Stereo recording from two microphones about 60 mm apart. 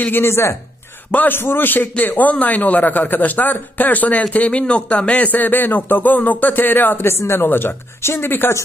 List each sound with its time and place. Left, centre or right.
0.2 s speech: left
1.1 s a man's voice: left
7.2 s speech: left
7.4 s speech: left